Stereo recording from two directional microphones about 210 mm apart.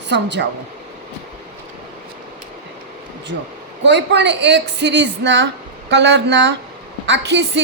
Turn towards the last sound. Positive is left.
turn(degrees=-55)  # may be behind; listen again after turning